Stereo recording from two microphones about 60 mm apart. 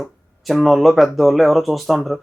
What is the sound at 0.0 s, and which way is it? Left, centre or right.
Speech, centre.